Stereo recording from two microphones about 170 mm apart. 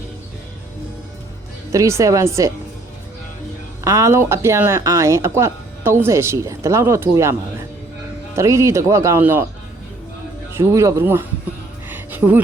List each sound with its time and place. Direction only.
1.7 s speech: 15° right (ahead or behind)
3.8 s speech: 20° right (ahead or behind)
8.4 s speech: 15° right (ahead or behind)
10.5 s speech: 15° right (ahead or behind)
11.9 s music: 10° right (ahead or behind)